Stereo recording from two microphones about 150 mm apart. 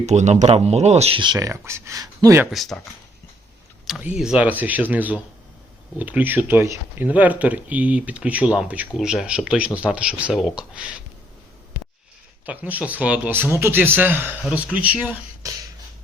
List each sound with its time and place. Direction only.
0.0 s speech: 50° right (ahead or behind)
1.2 s speech: 25° right (ahead or behind)
2.5 s speech: centre (ahead or behind)
4.2 s speech: 5° right (ahead or behind)
12.5 s speech: 10° right (ahead or behind)